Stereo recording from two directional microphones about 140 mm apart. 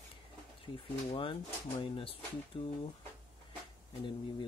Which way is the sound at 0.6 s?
40° left (ahead or behind).